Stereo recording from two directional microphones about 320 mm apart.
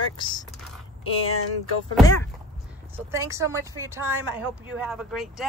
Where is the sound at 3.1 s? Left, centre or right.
Centre.